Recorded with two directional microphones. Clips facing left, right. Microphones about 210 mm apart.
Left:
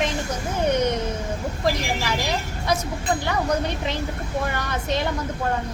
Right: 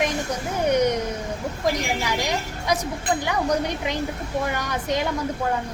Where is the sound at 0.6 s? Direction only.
15° right (ahead or behind).